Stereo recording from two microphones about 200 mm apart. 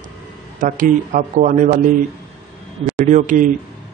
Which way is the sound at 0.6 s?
40° right (ahead or behind).